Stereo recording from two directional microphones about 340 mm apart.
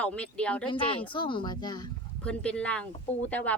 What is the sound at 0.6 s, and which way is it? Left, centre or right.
Speech, centre.